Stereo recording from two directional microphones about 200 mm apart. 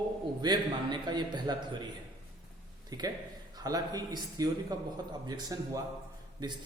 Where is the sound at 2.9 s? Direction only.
20° right (ahead or behind).